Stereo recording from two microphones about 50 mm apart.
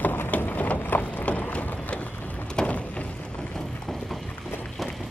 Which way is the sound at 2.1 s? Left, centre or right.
Left.